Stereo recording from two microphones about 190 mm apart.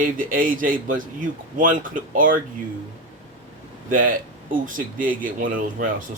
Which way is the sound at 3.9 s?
45° right (ahead or behind).